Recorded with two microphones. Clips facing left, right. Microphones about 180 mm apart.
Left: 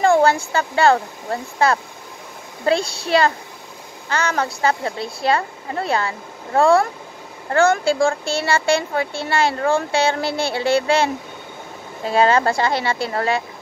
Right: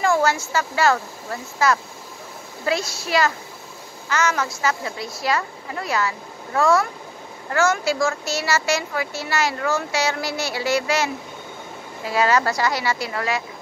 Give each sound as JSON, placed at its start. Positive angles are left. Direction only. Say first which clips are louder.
{"t": 0.5, "sound": "speech", "louder": "left 4 dB", "side_deg": 30}